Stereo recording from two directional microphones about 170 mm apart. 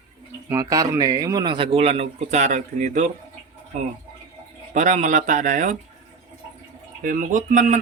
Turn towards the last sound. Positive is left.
turn(degrees=-50)  # may be behind; listen again after turning